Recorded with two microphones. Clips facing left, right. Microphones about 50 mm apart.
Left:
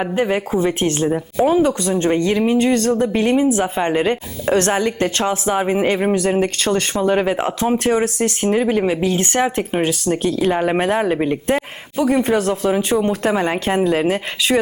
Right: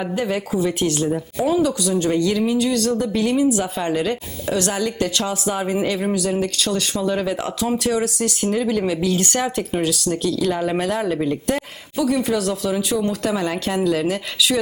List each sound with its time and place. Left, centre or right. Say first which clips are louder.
0.0 s speech: left 4 dB; left